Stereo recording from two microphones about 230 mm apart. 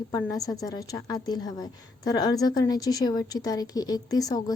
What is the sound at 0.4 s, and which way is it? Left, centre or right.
A woman's voice, centre.